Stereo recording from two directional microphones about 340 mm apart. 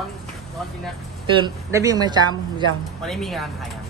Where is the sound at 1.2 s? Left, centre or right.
Centre.